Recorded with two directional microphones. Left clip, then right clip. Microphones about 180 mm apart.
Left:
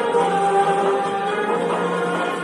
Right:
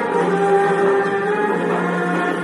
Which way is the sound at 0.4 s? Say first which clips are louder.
Right 2 dB; 40° left (ahead or behind).